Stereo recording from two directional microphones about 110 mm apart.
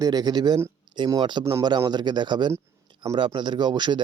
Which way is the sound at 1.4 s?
25° right (ahead or behind).